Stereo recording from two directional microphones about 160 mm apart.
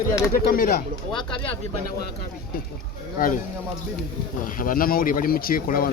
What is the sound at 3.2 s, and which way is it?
Speech, 60° left (ahead or behind).